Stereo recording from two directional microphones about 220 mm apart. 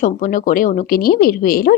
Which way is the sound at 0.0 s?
35° left (ahead or behind).